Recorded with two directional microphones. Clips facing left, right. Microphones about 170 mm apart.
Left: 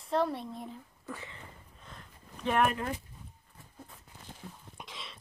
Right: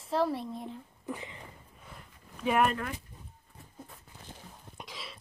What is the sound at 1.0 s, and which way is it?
Speech, 15° right (ahead or behind).